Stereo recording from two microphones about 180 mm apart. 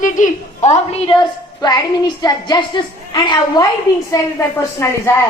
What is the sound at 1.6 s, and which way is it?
A woman's voice, 20° left (ahead or behind).